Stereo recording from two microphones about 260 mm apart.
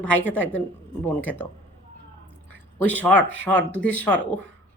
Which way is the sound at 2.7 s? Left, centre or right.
Centre.